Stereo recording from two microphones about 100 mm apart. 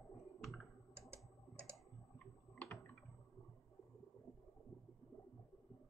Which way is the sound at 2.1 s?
15° left (ahead or behind).